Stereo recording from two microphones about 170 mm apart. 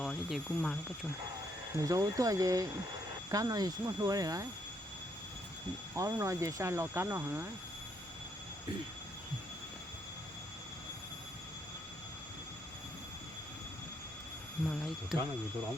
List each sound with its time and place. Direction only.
0.0 s speech: centre (ahead or behind)
1.7 s speech: 20° right (ahead or behind)
6.0 s speech: 15° right (ahead or behind)
14.7 s speech: centre (ahead or behind)